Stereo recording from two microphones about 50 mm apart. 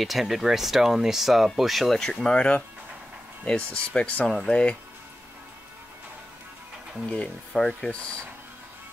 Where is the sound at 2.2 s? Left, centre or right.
Centre.